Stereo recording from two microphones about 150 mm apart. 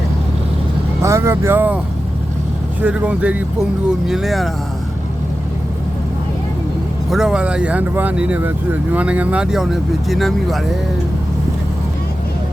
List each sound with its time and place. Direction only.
1.0 s speech: 20° right (ahead or behind)
2.8 s speech: 10° right (ahead or behind)
7.1 s speech: 5° right (ahead or behind)